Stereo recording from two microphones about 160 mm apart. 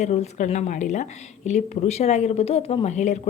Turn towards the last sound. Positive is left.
turn(degrees=45)  # may be behind; listen again after turning